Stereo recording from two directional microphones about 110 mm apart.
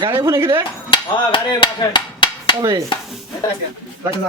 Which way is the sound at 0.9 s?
45° left (ahead or behind).